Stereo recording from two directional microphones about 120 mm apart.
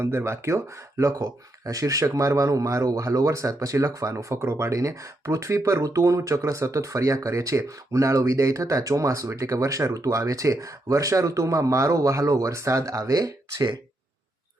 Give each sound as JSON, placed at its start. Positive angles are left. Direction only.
{"t": 0.0, "sound": "speech", "side_deg": -20}